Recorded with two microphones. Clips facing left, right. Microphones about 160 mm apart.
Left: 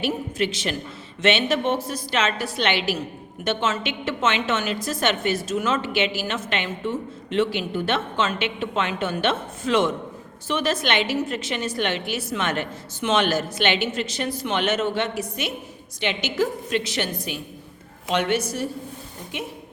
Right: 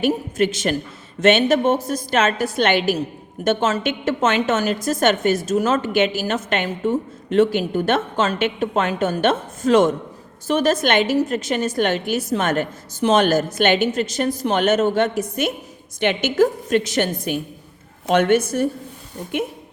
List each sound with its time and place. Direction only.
0.0 s a woman's voice: 45° right (ahead or behind)